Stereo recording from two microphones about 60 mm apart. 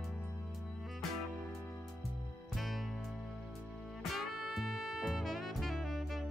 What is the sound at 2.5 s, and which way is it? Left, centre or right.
Music, centre.